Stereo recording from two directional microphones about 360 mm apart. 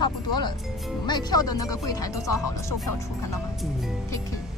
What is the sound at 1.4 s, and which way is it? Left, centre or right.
Speech, left.